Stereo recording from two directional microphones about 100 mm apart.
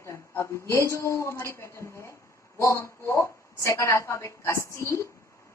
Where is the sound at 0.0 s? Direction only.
30° left (ahead or behind).